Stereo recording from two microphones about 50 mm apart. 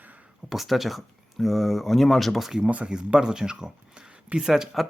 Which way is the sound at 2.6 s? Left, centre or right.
Right.